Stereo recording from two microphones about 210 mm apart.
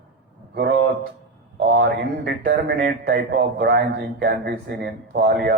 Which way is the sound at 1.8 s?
50° right (ahead or behind).